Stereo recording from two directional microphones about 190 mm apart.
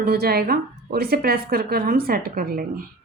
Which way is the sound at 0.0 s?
55° right (ahead or behind).